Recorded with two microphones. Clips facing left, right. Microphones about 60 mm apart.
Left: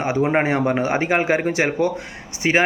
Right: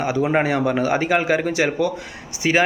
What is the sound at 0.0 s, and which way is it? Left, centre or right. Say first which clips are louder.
Speech: even; left.